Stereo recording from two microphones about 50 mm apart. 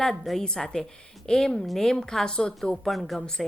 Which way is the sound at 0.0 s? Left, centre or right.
Centre.